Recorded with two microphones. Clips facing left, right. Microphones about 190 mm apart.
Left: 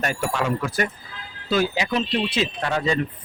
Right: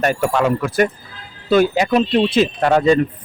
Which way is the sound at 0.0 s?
55° right (ahead or behind).